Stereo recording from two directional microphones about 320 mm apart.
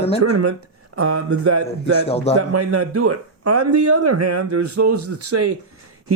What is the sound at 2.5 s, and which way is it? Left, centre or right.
Speech, right.